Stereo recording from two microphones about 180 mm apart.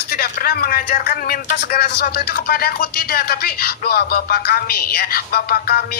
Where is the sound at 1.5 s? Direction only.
60° left (ahead or behind).